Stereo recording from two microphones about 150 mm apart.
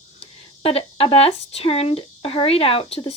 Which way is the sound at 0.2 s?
40° left (ahead or behind).